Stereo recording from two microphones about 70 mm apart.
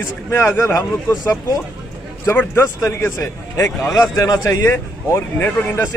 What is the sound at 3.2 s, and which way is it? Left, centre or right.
A man's voice, left.